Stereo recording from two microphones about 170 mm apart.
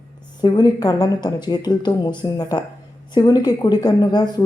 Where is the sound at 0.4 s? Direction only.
25° left (ahead or behind).